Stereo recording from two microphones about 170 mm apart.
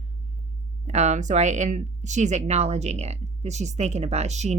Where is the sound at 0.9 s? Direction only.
45° right (ahead or behind).